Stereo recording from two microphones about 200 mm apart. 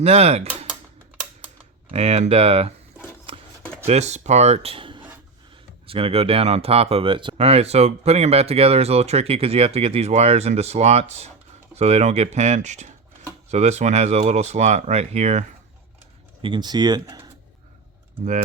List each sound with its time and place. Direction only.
0.0 s speech: 30° right (ahead or behind)
1.9 s speech: 30° right (ahead or behind)
3.3 s chopping: 25° right (ahead or behind)
3.8 s speech: 35° right (ahead or behind)
16.4 s speech: 25° right (ahead or behind)